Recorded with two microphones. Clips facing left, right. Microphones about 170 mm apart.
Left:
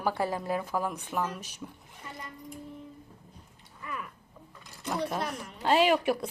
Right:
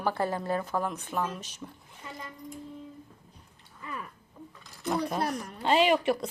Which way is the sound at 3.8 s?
30° right (ahead or behind).